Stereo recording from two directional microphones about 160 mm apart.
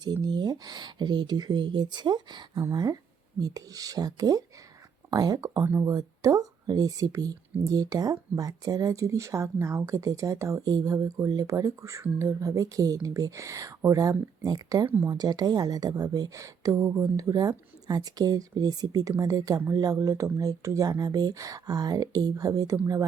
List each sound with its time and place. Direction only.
0.0 s speech: 25° right (ahead or behind)